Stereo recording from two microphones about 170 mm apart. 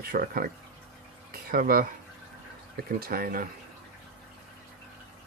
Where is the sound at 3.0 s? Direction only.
60° right (ahead or behind).